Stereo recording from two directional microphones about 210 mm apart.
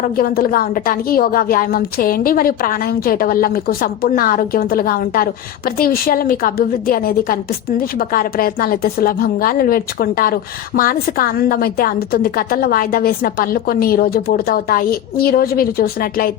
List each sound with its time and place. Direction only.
0.2 s a woman's voice: 45° left (ahead or behind)